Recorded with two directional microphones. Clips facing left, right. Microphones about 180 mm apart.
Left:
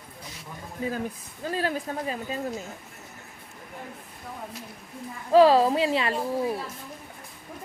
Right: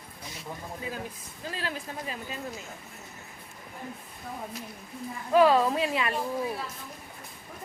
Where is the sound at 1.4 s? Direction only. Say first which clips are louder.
Left 7 dB; 45° left (ahead or behind).